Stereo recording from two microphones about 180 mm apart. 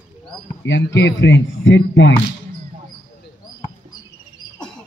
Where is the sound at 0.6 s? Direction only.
80° left.